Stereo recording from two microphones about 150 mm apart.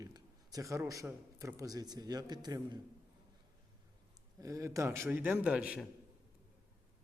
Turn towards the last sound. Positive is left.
turn(degrees=-5)  # may be behind; listen again after turning